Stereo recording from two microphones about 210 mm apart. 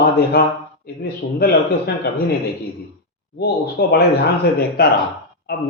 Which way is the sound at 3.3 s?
50° left (ahead or behind).